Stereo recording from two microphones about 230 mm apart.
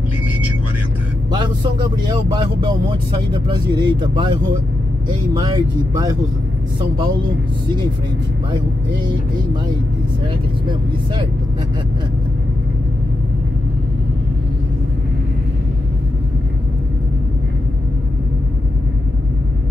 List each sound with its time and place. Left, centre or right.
1.3 s speech: centre